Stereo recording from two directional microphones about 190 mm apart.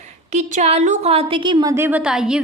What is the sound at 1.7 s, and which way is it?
Speech, 10° right (ahead or behind).